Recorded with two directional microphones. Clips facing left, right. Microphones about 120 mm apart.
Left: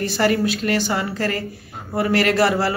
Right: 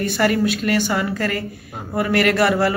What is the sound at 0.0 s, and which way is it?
Speech, 30° left (ahead or behind).